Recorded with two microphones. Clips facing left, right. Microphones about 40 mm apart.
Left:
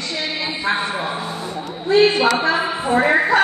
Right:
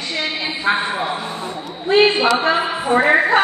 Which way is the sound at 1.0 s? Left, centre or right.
Right.